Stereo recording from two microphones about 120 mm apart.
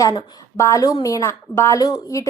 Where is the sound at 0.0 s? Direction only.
25° left (ahead or behind).